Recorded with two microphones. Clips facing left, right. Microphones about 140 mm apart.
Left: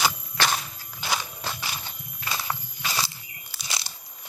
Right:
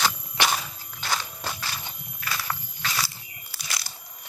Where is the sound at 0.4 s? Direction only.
15° right (ahead or behind).